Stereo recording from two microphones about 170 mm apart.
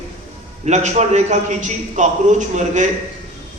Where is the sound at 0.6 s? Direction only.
45° right (ahead or behind).